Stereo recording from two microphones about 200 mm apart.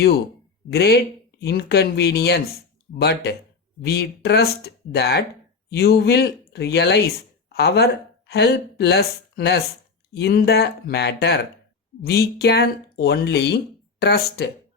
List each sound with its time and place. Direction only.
0.7 s speech: 55° left (ahead or behind)